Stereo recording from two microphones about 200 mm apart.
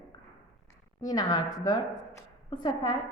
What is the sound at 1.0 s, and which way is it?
A woman's voice, 20° left (ahead or behind).